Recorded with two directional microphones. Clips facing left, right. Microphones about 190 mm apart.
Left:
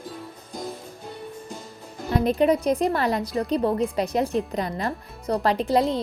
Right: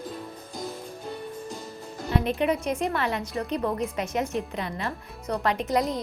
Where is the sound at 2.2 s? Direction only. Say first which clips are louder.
Left 8 dB; 35° left (ahead or behind).